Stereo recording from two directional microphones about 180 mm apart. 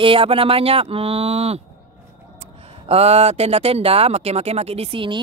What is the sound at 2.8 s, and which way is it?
Speech, 35° right (ahead or behind).